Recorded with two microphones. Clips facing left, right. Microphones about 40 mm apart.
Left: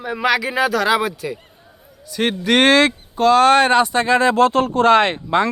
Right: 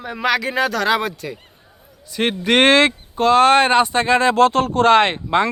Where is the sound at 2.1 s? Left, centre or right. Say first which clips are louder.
Even; right.